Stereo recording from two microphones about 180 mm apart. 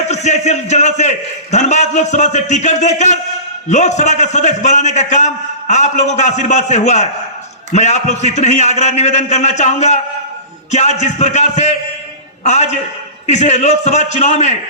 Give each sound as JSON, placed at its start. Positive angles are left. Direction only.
{"t": 0.1, "sound": "a man's voice", "side_deg": 40}